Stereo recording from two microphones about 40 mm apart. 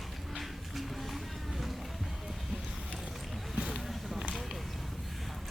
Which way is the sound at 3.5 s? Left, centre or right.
Right.